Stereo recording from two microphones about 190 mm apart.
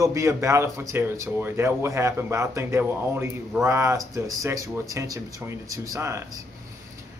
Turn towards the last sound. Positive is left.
turn(degrees=-15)  # may be behind; listen again after turning